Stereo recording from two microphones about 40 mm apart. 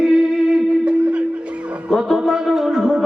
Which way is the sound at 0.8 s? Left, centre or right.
Right.